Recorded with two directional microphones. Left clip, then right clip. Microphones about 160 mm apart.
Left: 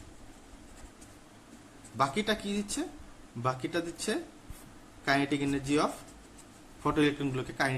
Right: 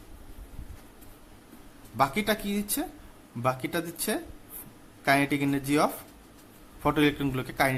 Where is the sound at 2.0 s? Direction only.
40° right (ahead or behind).